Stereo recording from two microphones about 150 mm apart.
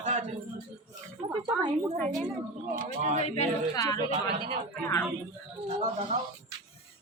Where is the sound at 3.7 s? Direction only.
25° left (ahead or behind).